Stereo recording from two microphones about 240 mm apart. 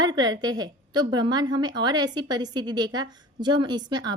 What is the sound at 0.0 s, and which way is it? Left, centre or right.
A woman's voice, centre.